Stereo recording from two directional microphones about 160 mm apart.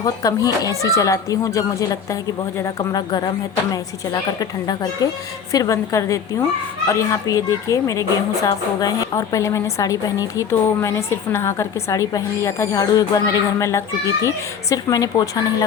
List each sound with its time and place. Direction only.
0.0 s a woman's voice: 20° left (ahead or behind)